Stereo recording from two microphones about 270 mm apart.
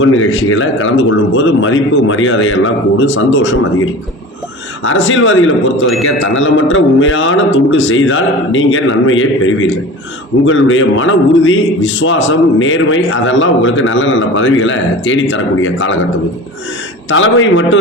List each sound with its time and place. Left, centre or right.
0.0 s a man's voice: left
4.8 s a man's voice: left
17.1 s a man's voice: left